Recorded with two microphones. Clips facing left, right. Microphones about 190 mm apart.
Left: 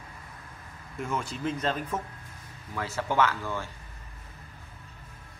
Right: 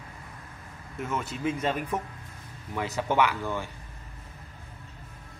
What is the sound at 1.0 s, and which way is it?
A man's voice, 5° right (ahead or behind).